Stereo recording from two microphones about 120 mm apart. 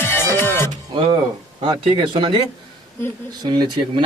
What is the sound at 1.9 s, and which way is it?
Speech, 40° right (ahead or behind).